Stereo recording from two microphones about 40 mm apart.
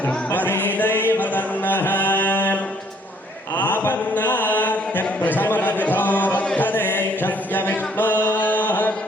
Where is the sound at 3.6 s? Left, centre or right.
Left.